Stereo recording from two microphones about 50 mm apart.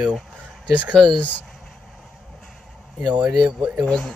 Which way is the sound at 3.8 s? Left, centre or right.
Centre.